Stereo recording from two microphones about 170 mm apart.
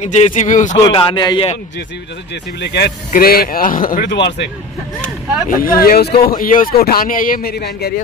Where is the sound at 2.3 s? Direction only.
80° left.